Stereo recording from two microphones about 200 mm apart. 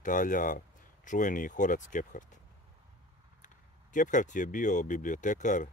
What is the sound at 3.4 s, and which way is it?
Speech, 40° left (ahead or behind).